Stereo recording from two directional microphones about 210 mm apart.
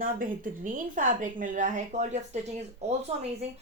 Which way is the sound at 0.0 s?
40° right (ahead or behind).